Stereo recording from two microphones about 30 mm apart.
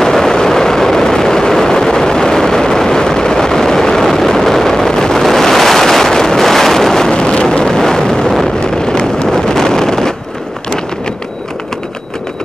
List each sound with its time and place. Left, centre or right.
0.0 s vehicle: centre
5.2 s wind noise: centre
7.1 s vehicle: left
8.5 s wind noise: left